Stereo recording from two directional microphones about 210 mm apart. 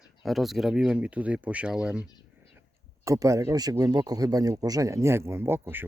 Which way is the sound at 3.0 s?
15° right (ahead or behind).